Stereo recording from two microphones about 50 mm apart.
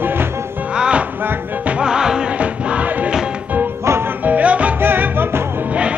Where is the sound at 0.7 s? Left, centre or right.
Centre.